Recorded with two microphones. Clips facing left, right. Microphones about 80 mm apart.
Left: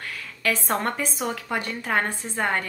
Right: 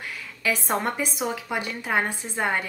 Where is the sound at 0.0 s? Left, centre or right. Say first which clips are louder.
Left 1 dB; centre.